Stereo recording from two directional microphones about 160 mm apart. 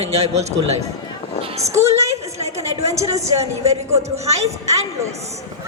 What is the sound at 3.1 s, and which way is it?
A woman's voice, 40° right (ahead or behind).